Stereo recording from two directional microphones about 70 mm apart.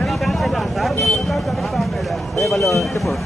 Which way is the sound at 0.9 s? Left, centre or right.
Left.